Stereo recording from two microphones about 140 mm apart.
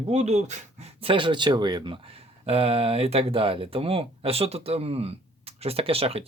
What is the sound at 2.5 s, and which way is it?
Speech, 45° right (ahead or behind).